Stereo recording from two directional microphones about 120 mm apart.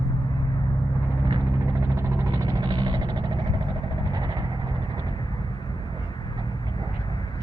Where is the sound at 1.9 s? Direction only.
25° right (ahead or behind).